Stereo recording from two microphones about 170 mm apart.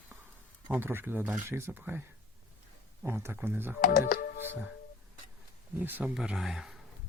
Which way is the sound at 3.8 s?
55° left (ahead or behind).